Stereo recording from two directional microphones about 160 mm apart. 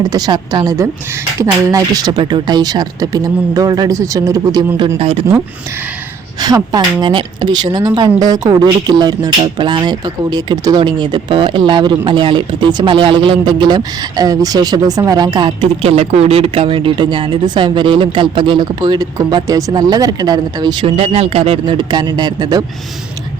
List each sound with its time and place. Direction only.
0.0 s a woman's voice: 25° right (ahead or behind)
4.9 s speech: 35° right (ahead or behind)
6.4 s a woman's voice: 25° right (ahead or behind)